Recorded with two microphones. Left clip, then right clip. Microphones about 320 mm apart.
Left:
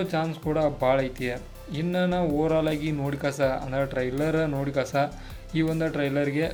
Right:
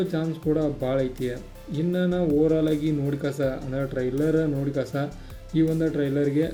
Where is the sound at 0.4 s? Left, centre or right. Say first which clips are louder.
Right 4 dB; left.